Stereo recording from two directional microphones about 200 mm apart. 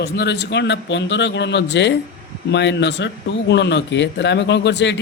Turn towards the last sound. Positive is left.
turn(degrees=60)  # may be behind; listen again after turning